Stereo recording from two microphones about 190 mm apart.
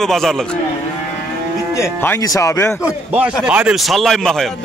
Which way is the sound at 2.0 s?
15° left (ahead or behind).